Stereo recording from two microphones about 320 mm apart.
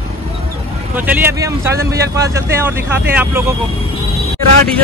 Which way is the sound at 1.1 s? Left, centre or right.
Centre.